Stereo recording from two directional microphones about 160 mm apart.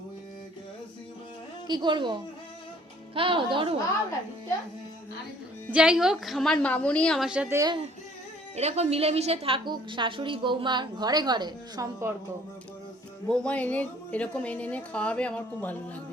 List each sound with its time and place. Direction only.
1.6 s a woman's voice: 25° right (ahead or behind)
3.2 s a woman's voice: 35° right (ahead or behind)
5.7 s a woman's voice: 5° right (ahead or behind)
7.5 s a woman's voice: 20° right (ahead or behind)
8.5 s a woman's voice: 40° right (ahead or behind); by 12.1 s 20° right (ahead or behind)
13.2 s a woman's voice: 5° left (ahead or behind)